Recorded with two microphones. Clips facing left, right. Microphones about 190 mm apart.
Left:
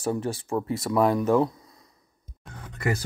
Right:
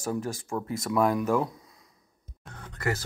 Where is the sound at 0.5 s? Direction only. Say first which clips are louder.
Left 5 dB; 10° left (ahead or behind).